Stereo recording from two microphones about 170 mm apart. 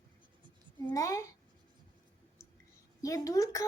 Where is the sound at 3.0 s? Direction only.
20° left (ahead or behind).